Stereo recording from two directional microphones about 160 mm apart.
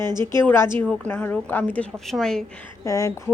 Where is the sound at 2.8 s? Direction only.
20° left (ahead or behind).